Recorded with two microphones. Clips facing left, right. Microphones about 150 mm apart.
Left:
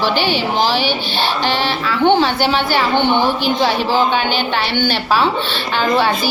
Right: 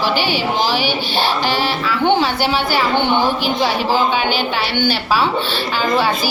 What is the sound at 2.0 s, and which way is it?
A woman's voice, 10° right (ahead or behind).